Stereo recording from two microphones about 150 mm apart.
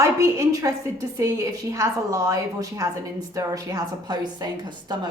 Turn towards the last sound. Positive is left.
turn(degrees=-30)  # may be behind; listen again after turning